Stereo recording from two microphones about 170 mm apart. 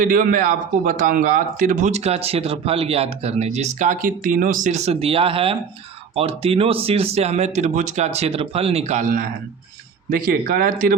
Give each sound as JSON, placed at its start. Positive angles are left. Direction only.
{"t": 0.0, "sound": "a man's voice", "side_deg": -55}